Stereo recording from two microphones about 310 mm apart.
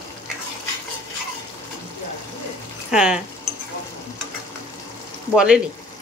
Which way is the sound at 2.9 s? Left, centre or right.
Centre.